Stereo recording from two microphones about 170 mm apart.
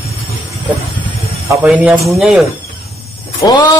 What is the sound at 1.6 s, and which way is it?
Speech, 5° right (ahead or behind).